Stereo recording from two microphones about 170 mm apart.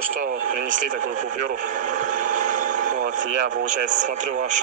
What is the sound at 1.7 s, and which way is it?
Vehicle, 50° right (ahead or behind).